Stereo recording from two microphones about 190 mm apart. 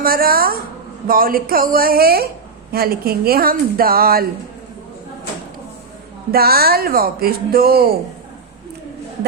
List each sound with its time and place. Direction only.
0.0 s speech: 50° right (ahead or behind)
6.3 s speech: 55° right (ahead or behind)